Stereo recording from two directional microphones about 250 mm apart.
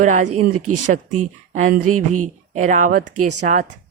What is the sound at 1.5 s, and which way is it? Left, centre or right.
Speech, right.